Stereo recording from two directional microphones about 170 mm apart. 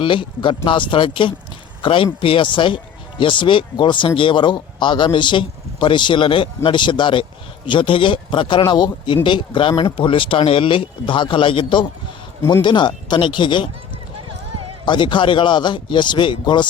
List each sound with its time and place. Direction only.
0.0 s speech: 30° left (ahead or behind)
12.4 s speech: 15° left (ahead or behind)
12.6 s speech: 25° left (ahead or behind)
14.8 s speech: 30° left (ahead or behind)